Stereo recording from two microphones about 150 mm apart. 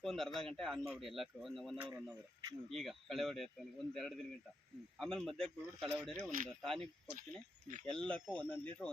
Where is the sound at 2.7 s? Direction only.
Centre (ahead or behind).